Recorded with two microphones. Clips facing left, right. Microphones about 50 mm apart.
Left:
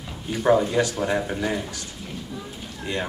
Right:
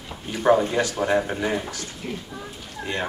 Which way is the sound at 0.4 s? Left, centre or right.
Right.